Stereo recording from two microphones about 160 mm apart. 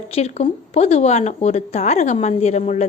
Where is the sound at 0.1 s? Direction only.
40° left (ahead or behind).